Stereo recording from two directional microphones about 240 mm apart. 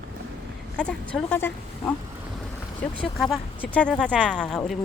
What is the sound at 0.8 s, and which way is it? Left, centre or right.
Speech, centre.